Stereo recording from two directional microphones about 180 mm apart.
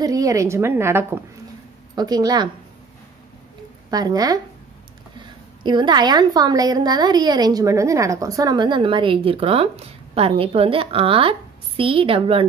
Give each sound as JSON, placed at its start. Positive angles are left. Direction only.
{"t": 0.0, "sound": "a woman's voice", "side_deg": -20}
{"t": 3.9, "sound": "a woman's voice", "side_deg": -20}
{"t": 5.6, "sound": "a woman's voice", "side_deg": -25}